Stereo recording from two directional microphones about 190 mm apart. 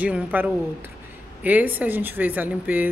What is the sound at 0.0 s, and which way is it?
A woman's voice, 10° right (ahead or behind).